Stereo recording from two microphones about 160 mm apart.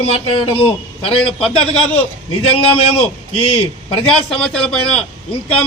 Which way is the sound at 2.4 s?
35° left (ahead or behind).